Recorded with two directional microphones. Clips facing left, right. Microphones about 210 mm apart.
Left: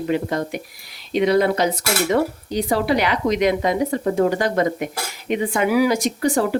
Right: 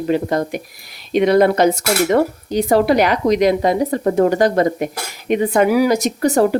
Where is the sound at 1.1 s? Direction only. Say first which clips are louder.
Right 4 dB; 55° right (ahead or behind).